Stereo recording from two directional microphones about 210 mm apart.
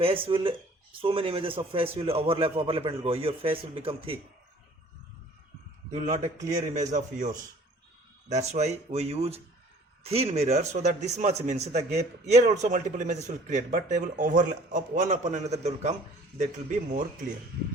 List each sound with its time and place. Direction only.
0.0 s a man's voice: 25° right (ahead or behind)
5.9 s speech: 35° right (ahead or behind)